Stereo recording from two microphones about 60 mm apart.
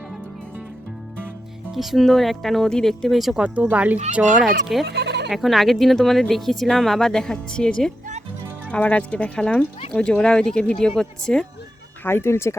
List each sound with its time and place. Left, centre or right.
1.7 s speech: centre
3.1 s speech: centre
3.4 s speech: right
4.4 s speech: centre
8.7 s speech: left
12.0 s speech: left